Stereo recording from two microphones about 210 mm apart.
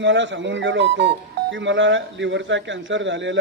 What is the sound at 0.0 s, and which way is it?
Speech, 60° right (ahead or behind).